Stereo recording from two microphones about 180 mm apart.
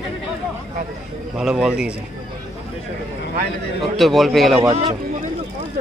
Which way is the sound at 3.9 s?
Centre (ahead or behind).